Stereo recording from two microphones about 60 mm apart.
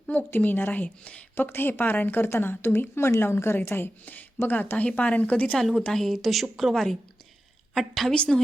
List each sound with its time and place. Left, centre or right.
0.3 s speech: left
1.4 s speech: left
5.5 s a woman's voice: centre